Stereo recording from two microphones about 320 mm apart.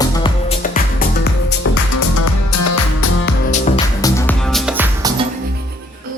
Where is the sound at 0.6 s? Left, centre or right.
Left.